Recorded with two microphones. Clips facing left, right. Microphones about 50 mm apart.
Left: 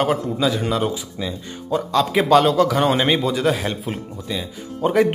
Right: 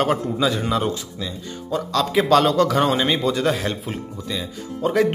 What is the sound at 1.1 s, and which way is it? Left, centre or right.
Speech, centre.